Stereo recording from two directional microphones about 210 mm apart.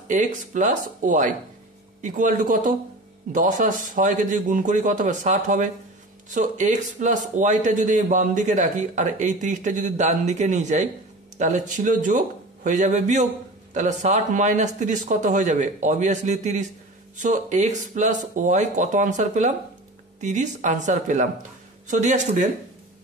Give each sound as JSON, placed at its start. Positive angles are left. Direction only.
{"t": 0.1, "sound": "speech", "side_deg": -35}